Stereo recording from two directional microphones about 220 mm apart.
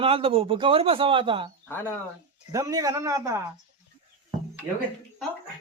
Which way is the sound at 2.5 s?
15° right (ahead or behind).